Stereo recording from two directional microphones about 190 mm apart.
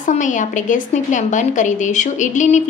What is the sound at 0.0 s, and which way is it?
A woman's voice, 40° left (ahead or behind).